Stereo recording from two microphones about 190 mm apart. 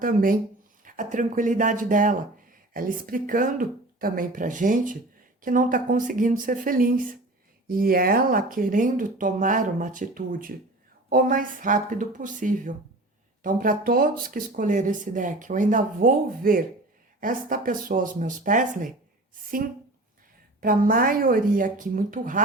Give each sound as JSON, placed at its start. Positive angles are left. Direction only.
{"t": 0.0, "sound": "speech", "side_deg": -45}
{"t": 20.6, "sound": "speech", "side_deg": -50}